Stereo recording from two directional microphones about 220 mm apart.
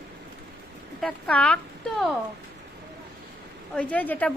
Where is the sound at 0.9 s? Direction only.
5° left (ahead or behind).